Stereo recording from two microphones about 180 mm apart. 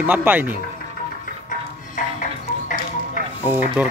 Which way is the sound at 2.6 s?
45° left (ahead or behind).